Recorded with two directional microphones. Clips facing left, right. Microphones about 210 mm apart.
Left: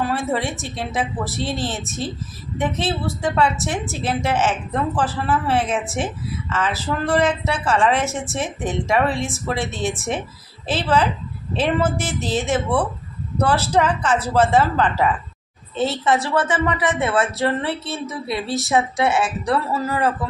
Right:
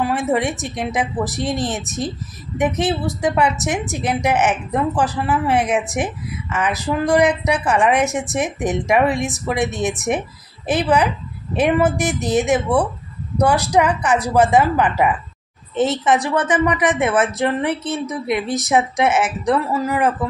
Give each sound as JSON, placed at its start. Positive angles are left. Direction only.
{"t": 0.0, "sound": "a woman's voice", "side_deg": -15}